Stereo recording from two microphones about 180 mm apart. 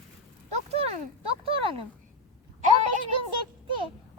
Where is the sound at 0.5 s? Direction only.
35° right (ahead or behind).